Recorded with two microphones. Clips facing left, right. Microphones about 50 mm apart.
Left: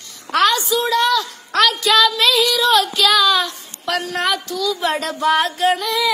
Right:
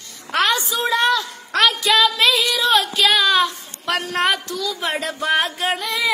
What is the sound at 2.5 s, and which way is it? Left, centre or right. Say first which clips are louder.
Speech: left 2 dB; right.